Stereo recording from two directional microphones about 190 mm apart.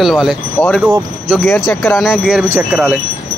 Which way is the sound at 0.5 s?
10° left (ahead or behind).